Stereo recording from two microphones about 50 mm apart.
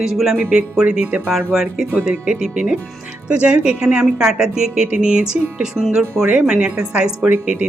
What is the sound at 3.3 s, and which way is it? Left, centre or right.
A woman's voice, right.